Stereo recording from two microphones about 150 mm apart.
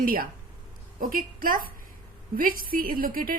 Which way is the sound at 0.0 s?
70° right (ahead or behind).